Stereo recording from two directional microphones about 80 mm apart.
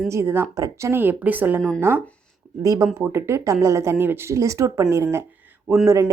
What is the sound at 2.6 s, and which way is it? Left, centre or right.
Speech, right.